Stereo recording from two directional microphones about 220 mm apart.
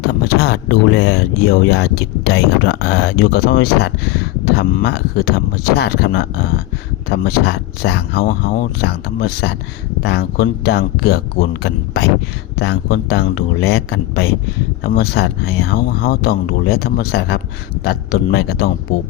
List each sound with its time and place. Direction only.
0.0 s speech: 45° left (ahead or behind)